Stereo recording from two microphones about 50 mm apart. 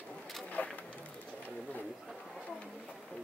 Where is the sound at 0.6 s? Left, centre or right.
Left.